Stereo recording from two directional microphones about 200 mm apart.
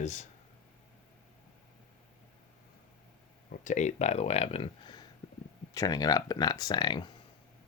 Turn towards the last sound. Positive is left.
turn(degrees=20)  # may be behind; listen again after turning